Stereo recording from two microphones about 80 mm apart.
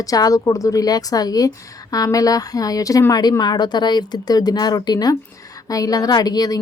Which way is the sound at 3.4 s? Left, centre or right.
Left.